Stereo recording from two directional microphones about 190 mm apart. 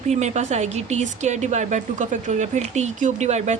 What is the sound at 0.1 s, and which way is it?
Speech, 35° right (ahead or behind).